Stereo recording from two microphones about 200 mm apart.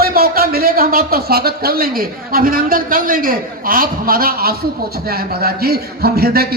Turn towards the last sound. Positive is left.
turn(degrees=-50)  # may be behind; listen again after turning